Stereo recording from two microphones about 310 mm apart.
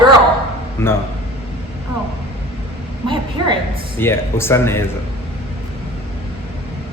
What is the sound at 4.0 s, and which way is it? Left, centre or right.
Speech, centre.